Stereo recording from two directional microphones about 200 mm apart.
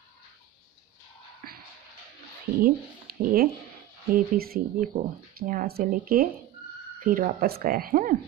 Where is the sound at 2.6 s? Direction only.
45° right (ahead or behind).